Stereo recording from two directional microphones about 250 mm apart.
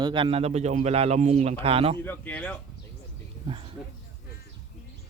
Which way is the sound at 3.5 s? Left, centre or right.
Right.